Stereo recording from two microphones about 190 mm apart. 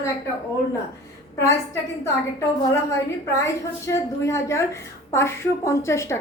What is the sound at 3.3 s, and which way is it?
A woman's voice, 15° left (ahead or behind).